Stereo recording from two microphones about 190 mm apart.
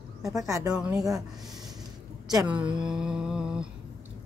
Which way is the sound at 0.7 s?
5° right (ahead or behind).